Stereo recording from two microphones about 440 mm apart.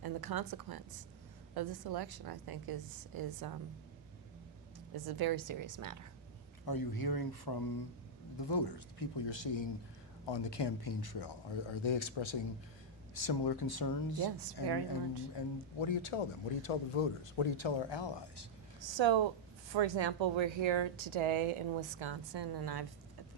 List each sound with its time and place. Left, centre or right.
0.0 s a woman's voice: right
5.0 s a woman's voice: right
6.7 s speech: left
13.1 s speech: left
14.3 s a woman's voice: right
15.4 s a man's voice: left
17.4 s speech: left
18.8 s speech: right